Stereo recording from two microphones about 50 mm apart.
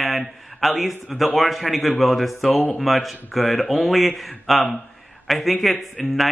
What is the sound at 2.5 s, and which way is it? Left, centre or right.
Speech, left.